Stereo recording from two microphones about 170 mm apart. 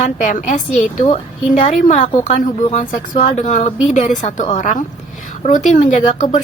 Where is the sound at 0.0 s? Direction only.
50° left (ahead or behind).